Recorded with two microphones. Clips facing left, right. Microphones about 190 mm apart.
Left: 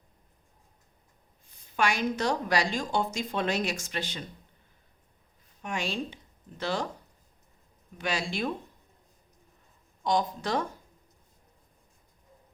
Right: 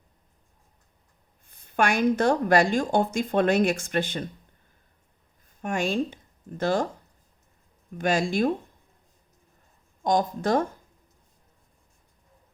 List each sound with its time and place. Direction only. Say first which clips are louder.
1.5 s speech: right 4 dB; 55° right (ahead or behind)
5.6 s speech: right 7 dB; 50° right (ahead or behind)
7.9 s speech: right 8 dB; 50° right (ahead or behind)
10.0 s speech: right 4 dB; 45° right (ahead or behind)